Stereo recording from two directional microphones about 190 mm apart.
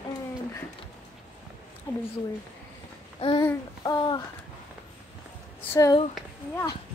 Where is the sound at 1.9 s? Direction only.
20° left (ahead or behind).